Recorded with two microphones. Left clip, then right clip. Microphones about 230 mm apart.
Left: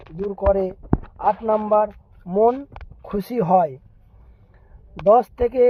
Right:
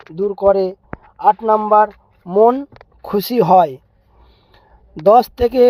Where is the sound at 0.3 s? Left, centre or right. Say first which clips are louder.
Right 6 dB; right.